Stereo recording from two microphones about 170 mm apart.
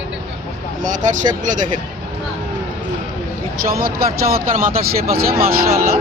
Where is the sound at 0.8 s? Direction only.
50° right (ahead or behind).